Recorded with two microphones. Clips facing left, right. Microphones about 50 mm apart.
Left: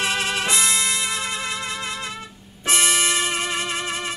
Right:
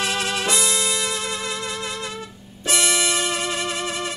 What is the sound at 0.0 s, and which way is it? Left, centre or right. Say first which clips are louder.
Music: even; left.